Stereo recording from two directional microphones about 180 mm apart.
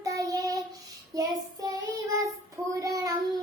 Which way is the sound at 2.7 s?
20° right (ahead or behind).